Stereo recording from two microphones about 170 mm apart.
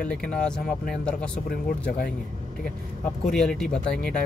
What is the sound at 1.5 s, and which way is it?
Speech, 60° left (ahead or behind).